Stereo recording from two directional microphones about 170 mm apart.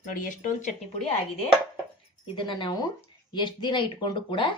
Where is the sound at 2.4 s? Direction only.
30° left (ahead or behind).